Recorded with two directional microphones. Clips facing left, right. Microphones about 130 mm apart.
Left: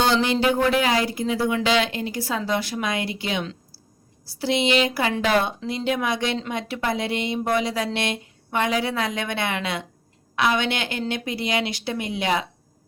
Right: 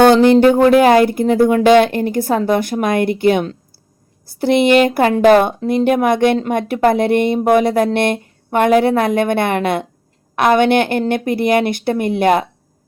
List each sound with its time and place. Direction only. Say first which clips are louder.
0.0 s speech: right 12 dB; 50° right (ahead or behind)